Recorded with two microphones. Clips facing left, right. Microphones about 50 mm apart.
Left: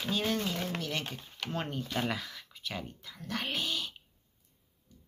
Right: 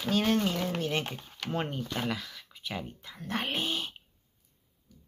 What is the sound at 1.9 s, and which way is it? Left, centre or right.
Speech, centre.